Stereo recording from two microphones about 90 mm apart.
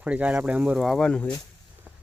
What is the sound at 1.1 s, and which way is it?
Speech, 10° left (ahead or behind).